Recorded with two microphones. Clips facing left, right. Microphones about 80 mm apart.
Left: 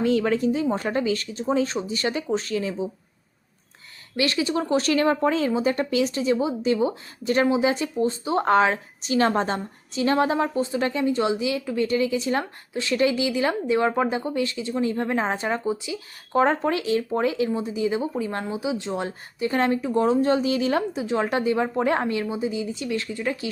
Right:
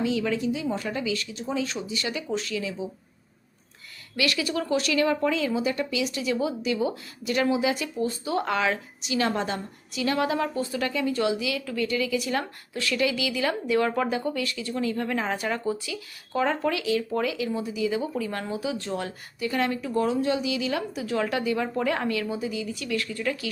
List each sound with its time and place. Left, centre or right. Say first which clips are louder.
0.0 s speech: left 5 dB; left
4.2 s speech: left 3 dB; left
16.3 s speech: left 4 dB; left
20.9 s speech: left 3 dB; left